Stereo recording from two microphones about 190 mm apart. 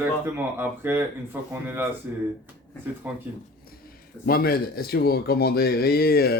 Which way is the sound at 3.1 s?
10° right (ahead or behind).